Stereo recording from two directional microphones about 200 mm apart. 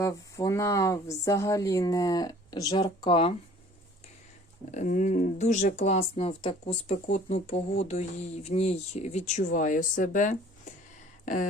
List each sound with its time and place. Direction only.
0.0 s speech: 15° left (ahead or behind)
4.7 s speech: 40° left (ahead or behind)